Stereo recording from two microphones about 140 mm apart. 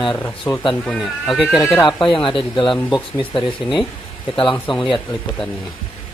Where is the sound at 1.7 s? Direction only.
35° left (ahead or behind).